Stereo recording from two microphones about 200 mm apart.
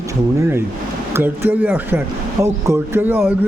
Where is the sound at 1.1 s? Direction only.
10° right (ahead or behind).